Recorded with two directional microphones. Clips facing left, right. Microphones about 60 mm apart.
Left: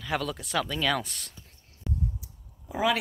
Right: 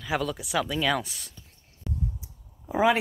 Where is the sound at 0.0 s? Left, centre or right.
Centre.